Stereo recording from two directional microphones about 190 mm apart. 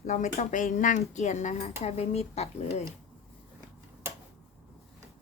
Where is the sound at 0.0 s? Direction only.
35° left (ahead or behind).